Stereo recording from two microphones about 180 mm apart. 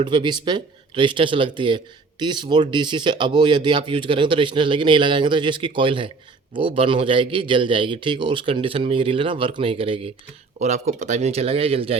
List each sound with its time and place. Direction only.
0.0 s speech: 25° right (ahead or behind)